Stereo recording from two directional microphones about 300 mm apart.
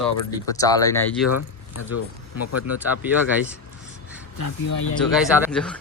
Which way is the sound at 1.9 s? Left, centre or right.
Left.